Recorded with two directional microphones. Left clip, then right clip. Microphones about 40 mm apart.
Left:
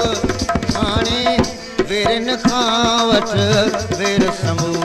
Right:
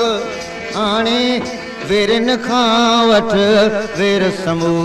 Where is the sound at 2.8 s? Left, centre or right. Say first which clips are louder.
Right 3 dB; left.